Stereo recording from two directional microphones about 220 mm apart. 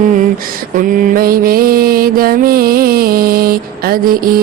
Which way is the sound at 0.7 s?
40° right (ahead or behind).